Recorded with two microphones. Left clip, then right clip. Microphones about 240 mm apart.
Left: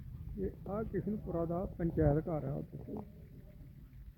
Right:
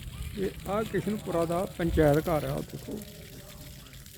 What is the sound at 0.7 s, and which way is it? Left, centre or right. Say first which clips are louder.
Speech: right 10 dB; centre.